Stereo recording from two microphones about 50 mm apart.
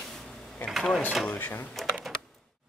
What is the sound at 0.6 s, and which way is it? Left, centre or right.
Cash register, left.